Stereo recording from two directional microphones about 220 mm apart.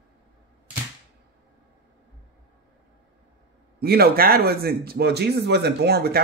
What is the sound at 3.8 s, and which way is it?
Speech, 45° right (ahead or behind).